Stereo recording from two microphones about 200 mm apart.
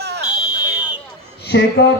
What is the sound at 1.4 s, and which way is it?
Speech, 60° left (ahead or behind).